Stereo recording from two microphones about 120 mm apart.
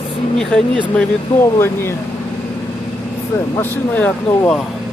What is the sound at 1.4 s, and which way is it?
Speech, 20° left (ahead or behind).